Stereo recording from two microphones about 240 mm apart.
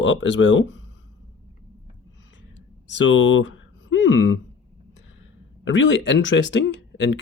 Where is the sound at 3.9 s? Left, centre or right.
Left.